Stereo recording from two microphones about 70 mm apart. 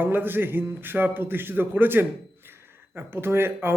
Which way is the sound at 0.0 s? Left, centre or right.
Right.